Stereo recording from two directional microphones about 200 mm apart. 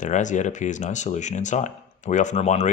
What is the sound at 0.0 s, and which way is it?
Speech, 40° left (ahead or behind).